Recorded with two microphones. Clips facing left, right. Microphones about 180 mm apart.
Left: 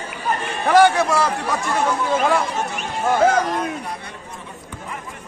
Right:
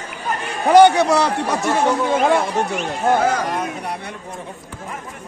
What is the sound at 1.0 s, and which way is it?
Speech, centre (ahead or behind).